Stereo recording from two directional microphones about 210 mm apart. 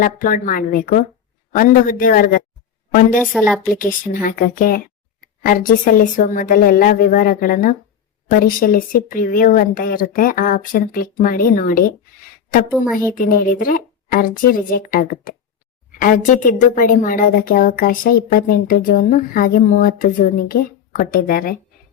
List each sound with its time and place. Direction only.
0.0 s speech: 40° left (ahead or behind)
3.2 s a woman's voice: centre (ahead or behind)
3.8 s a woman's voice: 40° left (ahead or behind)
13.1 s a woman's voice: 40° left (ahead or behind)